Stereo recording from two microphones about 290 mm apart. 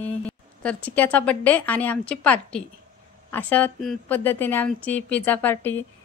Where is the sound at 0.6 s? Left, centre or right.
Centre.